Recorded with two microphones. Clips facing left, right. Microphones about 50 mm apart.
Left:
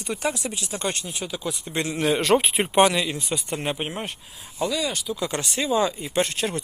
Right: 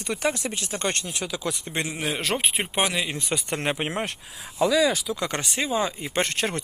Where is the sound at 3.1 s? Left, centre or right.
Right.